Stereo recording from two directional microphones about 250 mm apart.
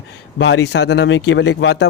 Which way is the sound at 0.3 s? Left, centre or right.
Left.